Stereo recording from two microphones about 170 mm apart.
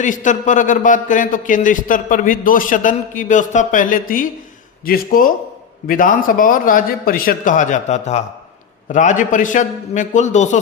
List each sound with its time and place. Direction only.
0.0 s speech: 50° left (ahead or behind)